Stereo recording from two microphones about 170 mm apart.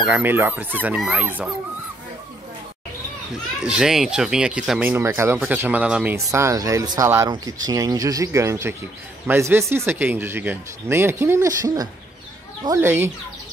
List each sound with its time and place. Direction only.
0.0 s speech: 10° right (ahead or behind)
3.6 s speech: 5° right (ahead or behind)